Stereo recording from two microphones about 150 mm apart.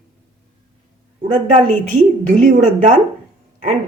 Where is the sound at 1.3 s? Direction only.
60° right (ahead or behind).